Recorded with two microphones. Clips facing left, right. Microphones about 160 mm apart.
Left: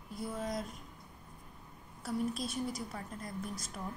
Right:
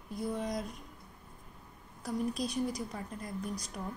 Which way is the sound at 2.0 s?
5° left (ahead or behind).